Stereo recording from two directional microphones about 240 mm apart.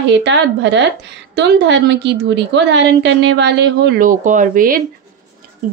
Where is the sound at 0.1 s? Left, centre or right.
Right.